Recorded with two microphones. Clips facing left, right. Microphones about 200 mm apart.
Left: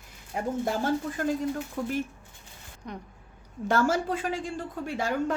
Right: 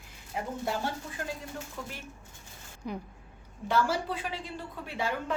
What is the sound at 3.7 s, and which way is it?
A woman's voice, 45° left (ahead or behind).